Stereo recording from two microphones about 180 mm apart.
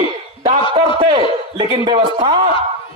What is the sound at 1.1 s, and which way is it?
A man's voice, 25° right (ahead or behind).